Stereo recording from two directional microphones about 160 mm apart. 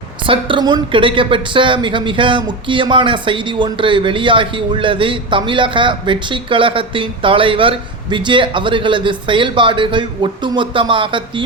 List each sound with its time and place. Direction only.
0.3 s a woman's voice: 30° right (ahead or behind)